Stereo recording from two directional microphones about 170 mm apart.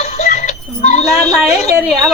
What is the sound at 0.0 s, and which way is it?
Music, 45° left (ahead or behind).